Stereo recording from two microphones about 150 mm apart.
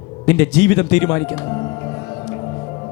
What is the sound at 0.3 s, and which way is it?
A man's voice, 20° left (ahead or behind).